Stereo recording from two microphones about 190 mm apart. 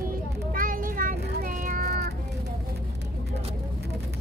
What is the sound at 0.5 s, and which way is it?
Child singing, 45° right (ahead or behind).